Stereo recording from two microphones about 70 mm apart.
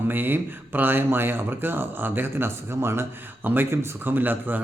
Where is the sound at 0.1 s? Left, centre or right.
Right.